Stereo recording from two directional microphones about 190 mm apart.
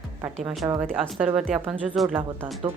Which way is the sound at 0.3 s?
Centre (ahead or behind).